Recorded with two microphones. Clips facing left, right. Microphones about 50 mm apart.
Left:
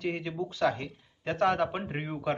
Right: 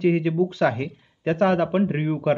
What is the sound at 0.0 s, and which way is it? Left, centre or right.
Speech, right.